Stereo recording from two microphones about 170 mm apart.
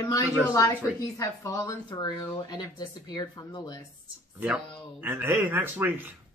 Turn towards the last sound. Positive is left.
turn(degrees=-10)  # may be behind; listen again after turning